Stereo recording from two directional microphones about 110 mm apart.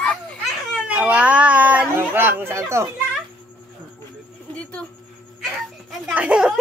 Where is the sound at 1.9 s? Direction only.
20° right (ahead or behind).